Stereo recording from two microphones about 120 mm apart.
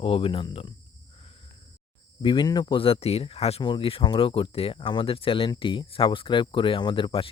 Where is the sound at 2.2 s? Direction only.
40° left (ahead or behind); by 3.6 s 55° left (ahead or behind).